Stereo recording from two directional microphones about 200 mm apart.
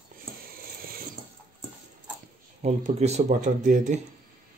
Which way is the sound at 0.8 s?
45° right (ahead or behind).